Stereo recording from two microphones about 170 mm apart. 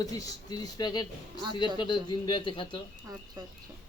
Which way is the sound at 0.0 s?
20° left (ahead or behind).